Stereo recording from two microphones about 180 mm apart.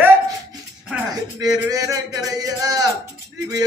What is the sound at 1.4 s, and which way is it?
A man's voice, 20° right (ahead or behind).